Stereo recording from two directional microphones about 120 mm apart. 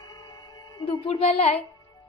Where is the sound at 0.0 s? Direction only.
30° left (ahead or behind).